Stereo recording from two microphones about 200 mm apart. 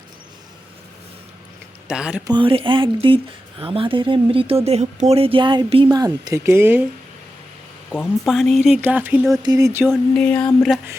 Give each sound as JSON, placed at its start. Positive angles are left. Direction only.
{"t": 1.9, "sound": "speech", "side_deg": -5}
{"t": 2.2, "sound": "speech", "side_deg": -25}
{"t": 7.9, "sound": "speech", "side_deg": 5}
{"t": 9.4, "sound": "speech", "side_deg": -15}
{"t": 9.9, "sound": "speech", "side_deg": 5}